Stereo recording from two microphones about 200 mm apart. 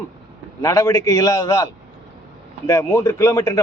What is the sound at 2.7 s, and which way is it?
Speech, 15° left (ahead or behind).